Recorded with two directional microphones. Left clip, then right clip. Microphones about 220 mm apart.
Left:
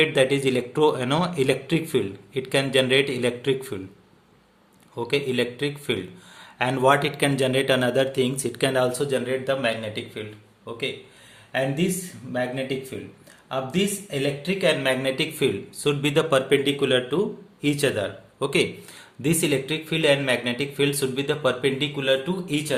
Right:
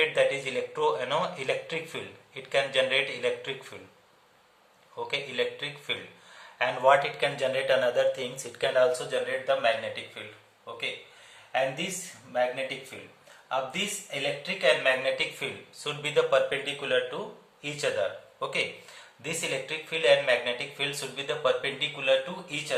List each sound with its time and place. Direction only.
0.0 s speech: 50° left (ahead or behind)
4.9 s speech: 45° left (ahead or behind)
12.3 s speech: 40° left (ahead or behind)